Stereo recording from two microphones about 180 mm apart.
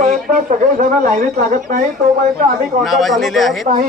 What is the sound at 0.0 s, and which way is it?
Speech, 45° right (ahead or behind).